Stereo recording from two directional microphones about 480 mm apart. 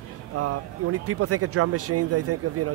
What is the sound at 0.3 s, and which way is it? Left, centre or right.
Speech, right.